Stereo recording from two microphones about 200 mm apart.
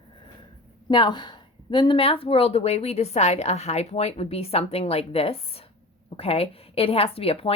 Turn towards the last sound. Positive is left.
turn(degrees=30)  # may be behind; listen again after turning